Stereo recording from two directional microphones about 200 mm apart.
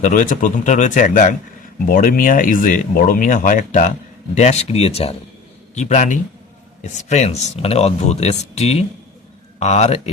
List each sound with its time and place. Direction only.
0.0 s speech: 40° left (ahead or behind)